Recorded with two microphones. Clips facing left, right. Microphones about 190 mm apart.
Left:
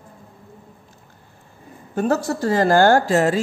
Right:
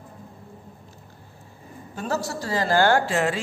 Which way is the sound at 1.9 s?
55° left (ahead or behind).